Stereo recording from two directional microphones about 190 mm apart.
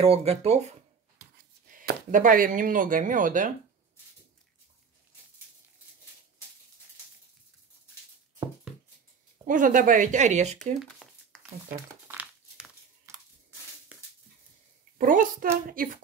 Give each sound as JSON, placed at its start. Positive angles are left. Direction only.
{"t": 0.0, "sound": "speech", "side_deg": -30}
{"t": 1.7, "sound": "speech", "side_deg": -45}
{"t": 9.5, "sound": "speech", "side_deg": -45}
{"t": 10.8, "sound": "a sound", "side_deg": 0}
{"t": 11.7, "sound": "crumpling", "side_deg": -15}
{"t": 15.0, "sound": "a child's voice", "side_deg": -45}